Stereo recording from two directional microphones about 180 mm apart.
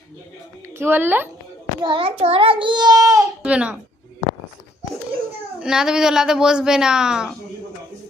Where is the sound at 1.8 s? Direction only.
30° right (ahead or behind).